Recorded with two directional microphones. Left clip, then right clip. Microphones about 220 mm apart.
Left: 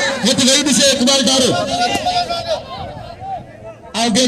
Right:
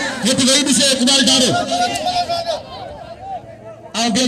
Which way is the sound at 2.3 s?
20° right (ahead or behind).